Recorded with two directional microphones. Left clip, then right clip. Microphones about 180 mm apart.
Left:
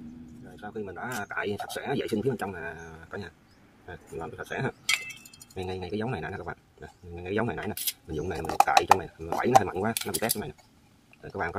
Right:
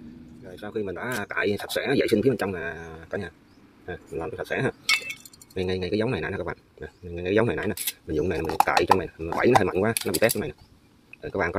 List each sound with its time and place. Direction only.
0.6 s speech: 35° right (ahead or behind)